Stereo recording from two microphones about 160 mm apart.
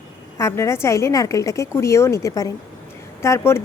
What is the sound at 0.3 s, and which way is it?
A woman's voice, 20° left (ahead or behind).